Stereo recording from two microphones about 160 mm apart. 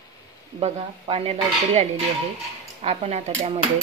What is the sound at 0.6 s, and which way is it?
Speech, 40° right (ahead or behind).